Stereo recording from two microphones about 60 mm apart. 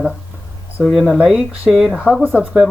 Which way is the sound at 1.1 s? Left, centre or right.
Centre.